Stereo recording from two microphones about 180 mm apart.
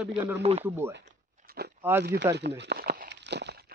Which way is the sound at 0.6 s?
15° right (ahead or behind).